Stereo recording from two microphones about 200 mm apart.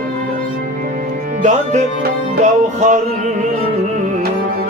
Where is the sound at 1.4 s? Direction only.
35° right (ahead or behind).